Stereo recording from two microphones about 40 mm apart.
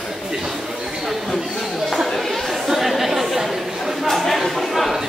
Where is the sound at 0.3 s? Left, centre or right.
Centre.